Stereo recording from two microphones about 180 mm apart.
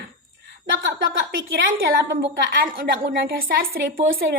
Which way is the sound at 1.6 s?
60° right (ahead or behind).